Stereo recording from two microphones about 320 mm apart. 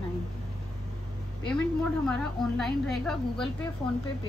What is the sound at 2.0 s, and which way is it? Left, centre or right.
A woman's voice, centre.